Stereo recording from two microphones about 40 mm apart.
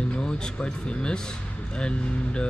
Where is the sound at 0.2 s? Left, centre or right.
Left.